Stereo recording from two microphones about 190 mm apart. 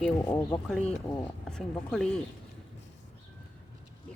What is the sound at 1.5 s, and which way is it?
Speech, 5° left (ahead or behind).